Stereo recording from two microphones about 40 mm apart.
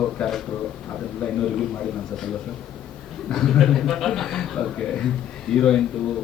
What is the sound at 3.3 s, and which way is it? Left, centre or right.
A man's voice, centre.